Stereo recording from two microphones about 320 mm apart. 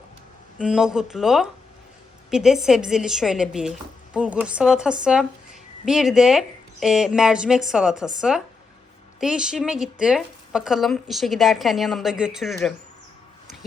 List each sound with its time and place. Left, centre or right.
0.6 s speech: centre
9.2 s speech: centre